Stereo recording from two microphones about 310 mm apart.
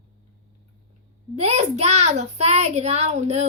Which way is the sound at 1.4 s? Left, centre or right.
Right.